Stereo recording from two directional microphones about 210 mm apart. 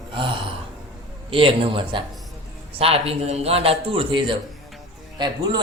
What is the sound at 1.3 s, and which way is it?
A man's voice, 25° right (ahead or behind).